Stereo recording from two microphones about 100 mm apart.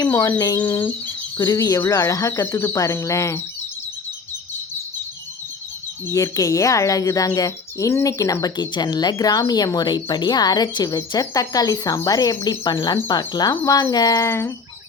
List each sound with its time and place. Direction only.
0.2 s speech: 35° left (ahead or behind)
0.6 s speech: 20° left (ahead or behind)
1.4 s speech: 35° left (ahead or behind)
6.1 s speech: 30° left (ahead or behind)